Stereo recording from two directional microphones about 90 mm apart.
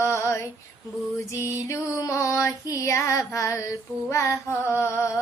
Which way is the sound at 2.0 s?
30° left (ahead or behind).